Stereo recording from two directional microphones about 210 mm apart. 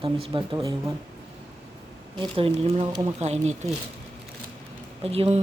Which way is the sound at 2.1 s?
25° right (ahead or behind).